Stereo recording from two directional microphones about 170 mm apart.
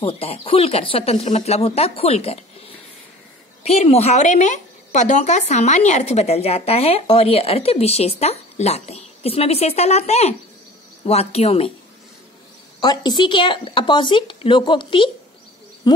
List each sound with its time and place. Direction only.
0.0 s a woman's voice: 35° left (ahead or behind)
12.8 s speech: 25° left (ahead or behind)